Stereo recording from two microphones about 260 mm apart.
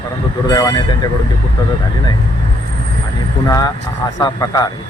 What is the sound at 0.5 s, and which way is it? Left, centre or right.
Speech, centre.